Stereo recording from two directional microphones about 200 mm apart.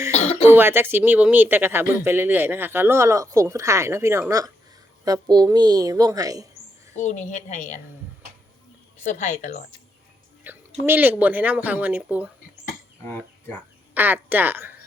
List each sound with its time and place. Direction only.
0.1 s throat clearing: 35° left (ahead or behind)
0.4 s speech: 10° right (ahead or behind)
6.9 s a woman's voice: 35° left (ahead or behind)
9.0 s a woman's voice: 35° left (ahead or behind)
10.4 s speech: 10° right (ahead or behind)
13.1 s speech: 10° left (ahead or behind)
13.9 s speech: 10° right (ahead or behind)